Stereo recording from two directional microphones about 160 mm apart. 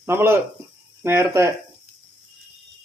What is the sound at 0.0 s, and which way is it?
Speech, 15° right (ahead or behind).